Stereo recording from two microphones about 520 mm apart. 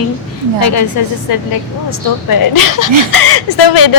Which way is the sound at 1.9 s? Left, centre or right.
Left.